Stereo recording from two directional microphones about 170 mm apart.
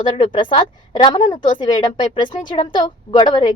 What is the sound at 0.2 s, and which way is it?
A woman's voice, 30° left (ahead or behind).